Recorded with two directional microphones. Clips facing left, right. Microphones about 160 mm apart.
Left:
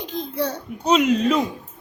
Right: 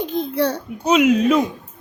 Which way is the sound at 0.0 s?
55° right (ahead or behind).